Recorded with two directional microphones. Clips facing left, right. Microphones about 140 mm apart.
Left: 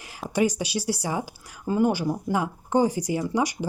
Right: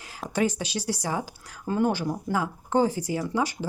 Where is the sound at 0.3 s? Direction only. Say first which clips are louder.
Left 2 dB; 10° left (ahead or behind).